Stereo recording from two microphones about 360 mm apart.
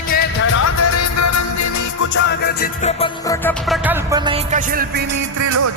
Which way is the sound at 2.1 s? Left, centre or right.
Left.